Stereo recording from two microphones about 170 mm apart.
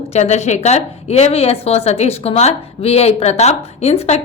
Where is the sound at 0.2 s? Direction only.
40° left (ahead or behind).